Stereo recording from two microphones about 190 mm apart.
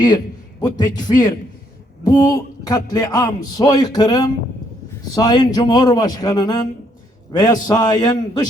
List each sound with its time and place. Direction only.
0.6 s a man's voice: 20° left (ahead or behind)